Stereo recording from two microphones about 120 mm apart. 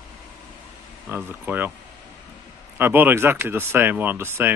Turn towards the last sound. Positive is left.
turn(degrees=-20)  # may be behind; listen again after turning